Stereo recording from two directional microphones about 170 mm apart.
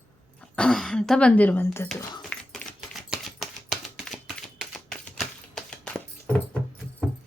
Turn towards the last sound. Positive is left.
turn(degrees=5)  # may be behind; listen again after turning